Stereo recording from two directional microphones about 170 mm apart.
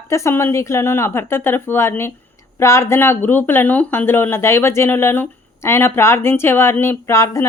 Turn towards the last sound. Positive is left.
turn(degrees=15)  # may be behind; listen again after turning